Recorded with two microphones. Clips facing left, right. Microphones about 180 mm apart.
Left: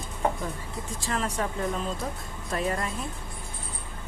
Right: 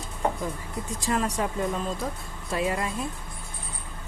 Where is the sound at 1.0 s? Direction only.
15° right (ahead or behind).